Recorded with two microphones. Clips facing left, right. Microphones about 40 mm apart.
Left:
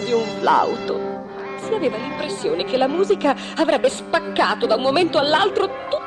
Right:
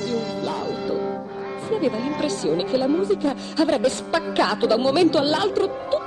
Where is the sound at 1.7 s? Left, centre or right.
Left.